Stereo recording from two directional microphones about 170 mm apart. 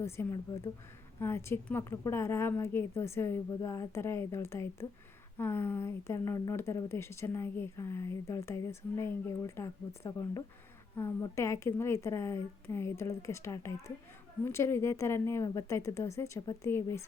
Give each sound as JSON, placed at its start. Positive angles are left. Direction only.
{"t": 0.0, "sound": "speech", "side_deg": 15}